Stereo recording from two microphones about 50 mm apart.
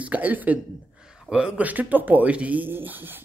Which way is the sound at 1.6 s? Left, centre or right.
Right.